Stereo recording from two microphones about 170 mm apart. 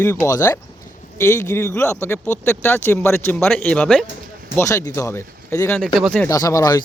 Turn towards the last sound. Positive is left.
turn(degrees=20)  # may be behind; listen again after turning